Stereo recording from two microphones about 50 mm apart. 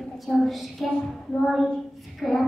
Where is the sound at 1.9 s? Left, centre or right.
Centre.